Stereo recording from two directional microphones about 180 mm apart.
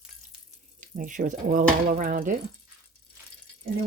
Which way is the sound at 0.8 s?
45° right (ahead or behind).